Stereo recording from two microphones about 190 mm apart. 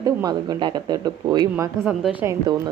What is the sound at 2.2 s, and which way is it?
Speech, 15° right (ahead or behind).